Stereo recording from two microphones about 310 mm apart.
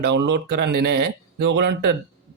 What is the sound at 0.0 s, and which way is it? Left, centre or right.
Speech, right.